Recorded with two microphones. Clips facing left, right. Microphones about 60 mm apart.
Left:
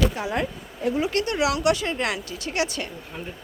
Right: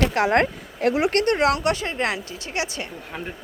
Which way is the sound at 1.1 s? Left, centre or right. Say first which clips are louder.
Right 4 dB; right.